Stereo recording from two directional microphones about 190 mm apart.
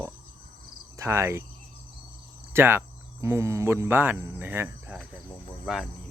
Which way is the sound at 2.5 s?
10° right (ahead or behind).